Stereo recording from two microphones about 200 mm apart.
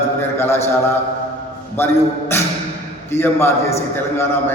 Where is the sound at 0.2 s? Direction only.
10° left (ahead or behind).